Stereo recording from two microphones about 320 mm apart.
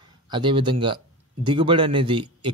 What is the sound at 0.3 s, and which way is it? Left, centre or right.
Speech, centre.